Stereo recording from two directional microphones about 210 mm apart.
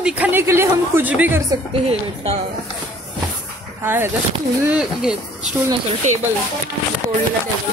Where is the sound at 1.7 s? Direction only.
30° right (ahead or behind).